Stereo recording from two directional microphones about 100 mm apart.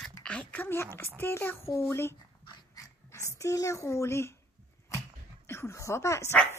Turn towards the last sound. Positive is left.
turn(degrees=30)  # may be behind; listen again after turning